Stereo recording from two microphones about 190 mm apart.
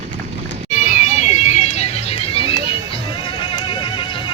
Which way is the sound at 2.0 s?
30° left (ahead or behind).